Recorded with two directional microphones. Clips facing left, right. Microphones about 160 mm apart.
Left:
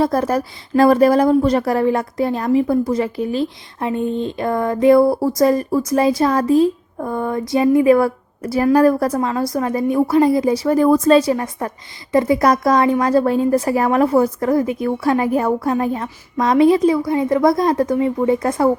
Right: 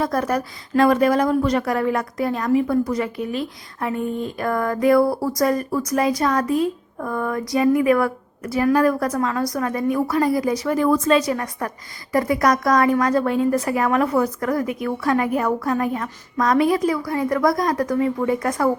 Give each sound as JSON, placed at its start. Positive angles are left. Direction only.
{"t": 0.0, "sound": "a woman's voice", "side_deg": 30}